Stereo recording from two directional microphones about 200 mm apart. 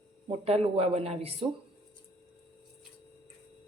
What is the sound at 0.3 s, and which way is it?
Speech, 30° right (ahead or behind).